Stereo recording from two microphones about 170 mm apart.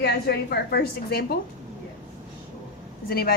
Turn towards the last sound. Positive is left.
turn(degrees=65)  # may be behind; listen again after turning